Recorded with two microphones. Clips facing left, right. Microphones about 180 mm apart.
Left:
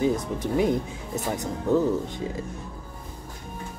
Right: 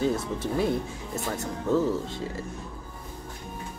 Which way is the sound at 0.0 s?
15° left (ahead or behind).